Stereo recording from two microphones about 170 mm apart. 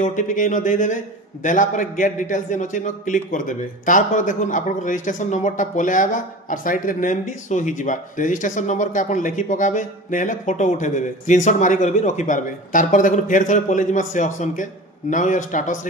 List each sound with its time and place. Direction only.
0.0 s a man's voice: 50° left (ahead or behind)